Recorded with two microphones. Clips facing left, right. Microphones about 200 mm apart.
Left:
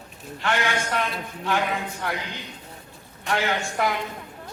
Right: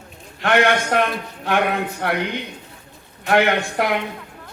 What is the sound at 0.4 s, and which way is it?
A man's voice, 60° right (ahead or behind).